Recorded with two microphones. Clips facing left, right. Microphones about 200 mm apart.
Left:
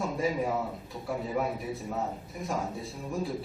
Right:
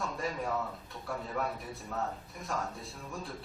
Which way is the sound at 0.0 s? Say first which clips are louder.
Left 6 dB; centre (ahead or behind).